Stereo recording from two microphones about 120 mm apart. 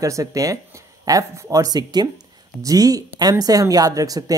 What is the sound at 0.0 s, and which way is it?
Speech, 25° right (ahead or behind).